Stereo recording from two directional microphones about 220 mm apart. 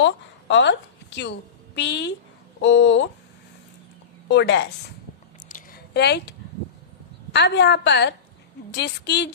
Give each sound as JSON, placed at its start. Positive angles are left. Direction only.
{"t": 0.0, "sound": "a woman's voice", "side_deg": 55}
{"t": 4.3, "sound": "a woman's voice", "side_deg": 50}
{"t": 5.5, "sound": "a sound", "side_deg": 40}
{"t": 7.3, "sound": "a woman's voice", "side_deg": 50}